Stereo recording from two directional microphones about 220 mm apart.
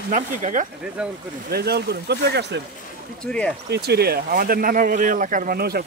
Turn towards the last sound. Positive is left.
turn(degrees=-45)  # may be behind; listen again after turning